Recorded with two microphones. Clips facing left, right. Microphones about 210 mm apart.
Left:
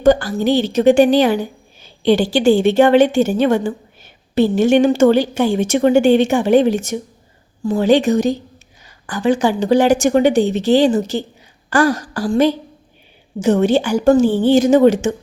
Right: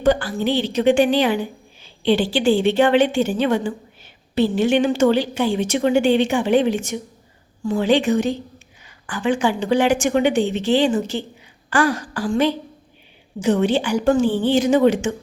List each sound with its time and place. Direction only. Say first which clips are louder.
0.0 s a woman's voice: left 5 dB; 45° left (ahead or behind)